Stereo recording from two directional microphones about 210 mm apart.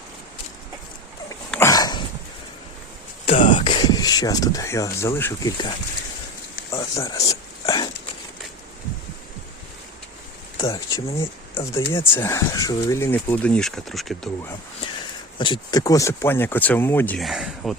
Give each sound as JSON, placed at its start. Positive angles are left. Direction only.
{"t": 1.5, "sound": "dog", "side_deg": 10}
{"t": 3.2, "sound": "a sound", "side_deg": 40}
{"t": 3.5, "sound": "speech", "side_deg": 20}
{"t": 6.7, "sound": "a sound", "side_deg": 15}
{"t": 10.6, "sound": "speech", "side_deg": 15}
{"t": 15.4, "sound": "speech", "side_deg": 25}